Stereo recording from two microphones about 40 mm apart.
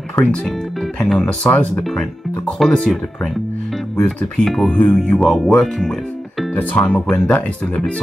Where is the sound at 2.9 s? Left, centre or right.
Centre.